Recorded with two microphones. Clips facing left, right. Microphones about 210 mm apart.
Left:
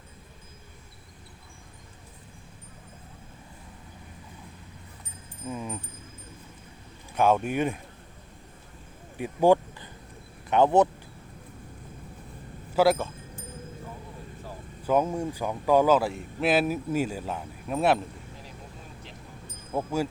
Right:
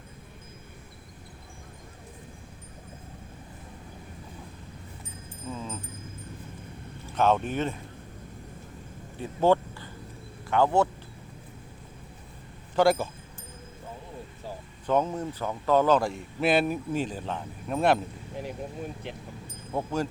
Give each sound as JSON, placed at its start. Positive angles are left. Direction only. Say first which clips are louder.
{"t": 5.5, "sound": "keys jangling", "louder": "left 2 dB", "side_deg": 15}
{"t": 7.2, "sound": "speech", "louder": "left 1 dB", "side_deg": 10}
{"t": 9.1, "sound": "a sound", "louder": "left 2 dB", "side_deg": 15}
{"t": 10.5, "sound": "speech", "louder": "left 3 dB", "side_deg": 20}
{"t": 12.7, "sound": "speech", "louder": "even", "side_deg": 0}
{"t": 14.8, "sound": "speech", "louder": "left 1 dB", "side_deg": 10}
{"t": 19.7, "sound": "speech", "louder": "left 1 dB", "side_deg": 10}